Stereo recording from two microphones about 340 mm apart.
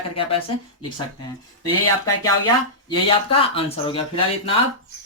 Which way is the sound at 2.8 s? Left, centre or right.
Centre.